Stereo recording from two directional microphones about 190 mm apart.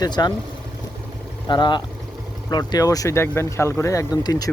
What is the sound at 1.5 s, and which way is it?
Speech, 25° left (ahead or behind).